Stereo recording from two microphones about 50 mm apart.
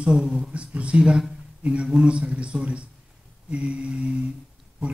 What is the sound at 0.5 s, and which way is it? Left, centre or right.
Speech, right.